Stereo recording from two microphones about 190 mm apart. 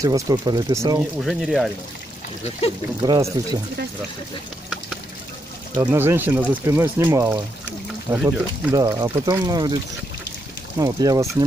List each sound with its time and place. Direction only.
0.0 s speech: 20° right (ahead or behind)
1.2 s speech: centre (ahead or behind)
3.0 s speech: 20° right (ahead or behind)
5.8 s speech: 10° right (ahead or behind)
8.7 s speech: 20° right (ahead or behind)
10.8 s speech: 15° right (ahead or behind)